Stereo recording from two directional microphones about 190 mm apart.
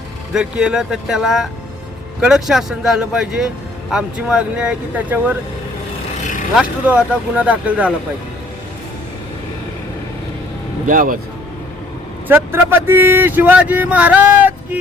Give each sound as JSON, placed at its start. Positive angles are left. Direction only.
{"t": 0.3, "sound": "speech", "side_deg": -5}
{"t": 6.6, "sound": "speech", "side_deg": -5}
{"t": 10.8, "sound": "speech", "side_deg": -45}
{"t": 12.3, "sound": "speech", "side_deg": -10}